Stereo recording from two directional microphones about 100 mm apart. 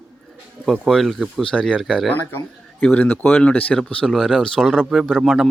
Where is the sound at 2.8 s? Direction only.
15° left (ahead or behind).